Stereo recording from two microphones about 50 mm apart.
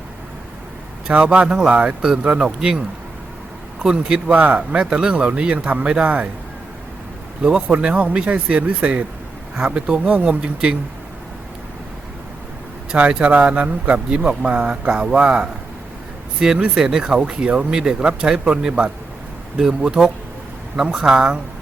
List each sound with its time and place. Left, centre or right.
1.1 s speech: right
3.8 s speech: centre
4.3 s speech: right
7.7 s speech: right
13.0 s speech: right
16.4 s speech: centre